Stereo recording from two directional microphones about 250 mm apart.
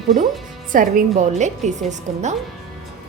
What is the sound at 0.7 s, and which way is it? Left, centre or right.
A woman's voice, right.